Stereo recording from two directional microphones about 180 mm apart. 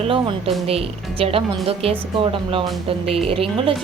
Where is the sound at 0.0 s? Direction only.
30° right (ahead or behind).